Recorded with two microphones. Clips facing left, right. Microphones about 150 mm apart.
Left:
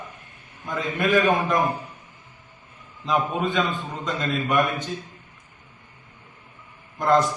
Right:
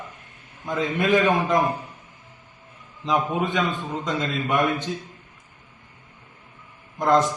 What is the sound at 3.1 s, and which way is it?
A man's voice, 20° right (ahead or behind).